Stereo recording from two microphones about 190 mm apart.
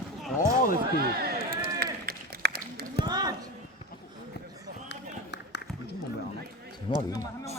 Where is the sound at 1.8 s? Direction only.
55° right (ahead or behind).